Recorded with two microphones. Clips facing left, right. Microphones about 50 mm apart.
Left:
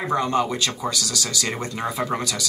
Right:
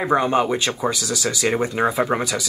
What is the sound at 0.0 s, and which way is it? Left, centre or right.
Speech, right.